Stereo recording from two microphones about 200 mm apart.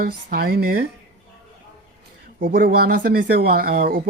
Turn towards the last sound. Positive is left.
turn(degrees=-50)  # may be behind; listen again after turning